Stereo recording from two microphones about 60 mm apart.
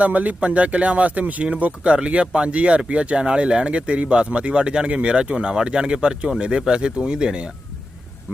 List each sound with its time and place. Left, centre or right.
0.0 s speech: right